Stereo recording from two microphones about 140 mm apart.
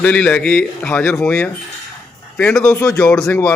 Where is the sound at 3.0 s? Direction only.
5° left (ahead or behind).